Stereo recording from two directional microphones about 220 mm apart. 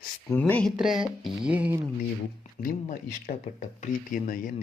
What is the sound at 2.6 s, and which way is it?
Speech, 40° left (ahead or behind).